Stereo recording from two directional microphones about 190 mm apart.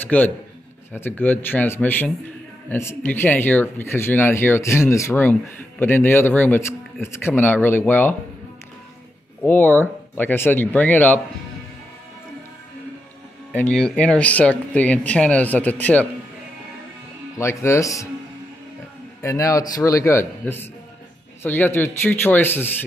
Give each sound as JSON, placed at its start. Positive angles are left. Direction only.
{"t": 0.1, "sound": "speech", "side_deg": 10}
{"t": 9.4, "sound": "speech", "side_deg": 10}
{"t": 13.5, "sound": "speech", "side_deg": 5}
{"t": 17.4, "sound": "speech", "side_deg": 15}
{"t": 19.2, "sound": "speech", "side_deg": 15}